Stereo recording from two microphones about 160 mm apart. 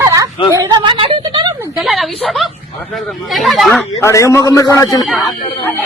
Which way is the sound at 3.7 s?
15° left (ahead or behind).